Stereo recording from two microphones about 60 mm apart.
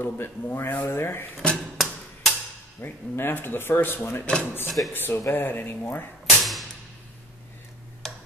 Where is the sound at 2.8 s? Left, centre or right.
Left.